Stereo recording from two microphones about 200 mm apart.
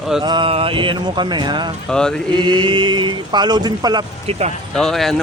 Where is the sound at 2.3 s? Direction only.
20° right (ahead or behind).